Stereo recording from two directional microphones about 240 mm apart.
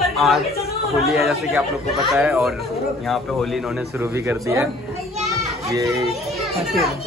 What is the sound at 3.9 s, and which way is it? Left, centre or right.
Speech, centre.